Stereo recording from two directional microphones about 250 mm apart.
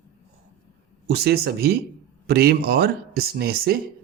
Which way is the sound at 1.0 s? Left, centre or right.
Right.